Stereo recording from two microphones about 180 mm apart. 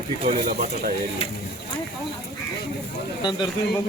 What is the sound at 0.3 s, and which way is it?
Speech, 35° right (ahead or behind).